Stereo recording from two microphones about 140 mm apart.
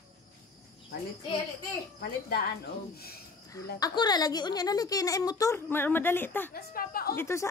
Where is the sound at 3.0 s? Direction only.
90° left.